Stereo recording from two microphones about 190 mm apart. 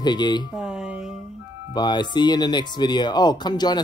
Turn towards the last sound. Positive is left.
turn(degrees=20)  # may be behind; listen again after turning